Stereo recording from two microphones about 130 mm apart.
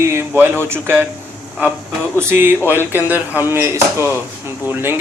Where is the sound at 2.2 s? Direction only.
15° right (ahead or behind).